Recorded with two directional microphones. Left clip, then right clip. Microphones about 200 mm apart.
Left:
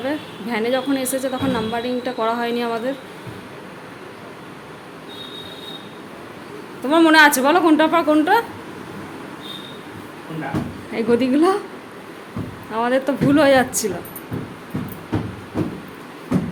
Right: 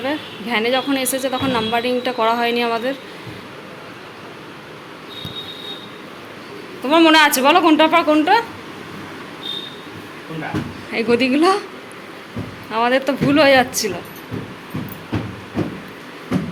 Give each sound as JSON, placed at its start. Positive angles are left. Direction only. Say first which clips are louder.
{"t": 0.0, "sound": "speech", "louder": "right 2 dB", "side_deg": 10}
{"t": 6.8, "sound": "speech", "louder": "even", "side_deg": 15}
{"t": 10.9, "sound": "speech", "louder": "right 1 dB", "side_deg": 15}
{"t": 12.7, "sound": "speech", "louder": "right 2 dB", "side_deg": 10}